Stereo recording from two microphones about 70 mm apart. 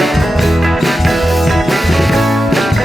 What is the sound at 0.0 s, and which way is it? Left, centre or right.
Music, centre.